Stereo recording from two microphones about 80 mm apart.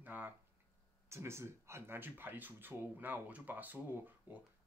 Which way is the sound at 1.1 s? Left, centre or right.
Right.